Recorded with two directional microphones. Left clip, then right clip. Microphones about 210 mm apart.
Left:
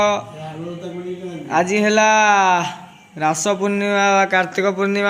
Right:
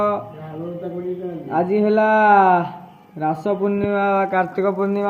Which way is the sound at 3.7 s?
45° left (ahead or behind).